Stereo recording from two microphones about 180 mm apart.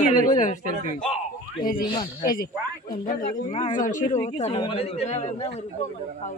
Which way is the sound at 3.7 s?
45° left (ahead or behind).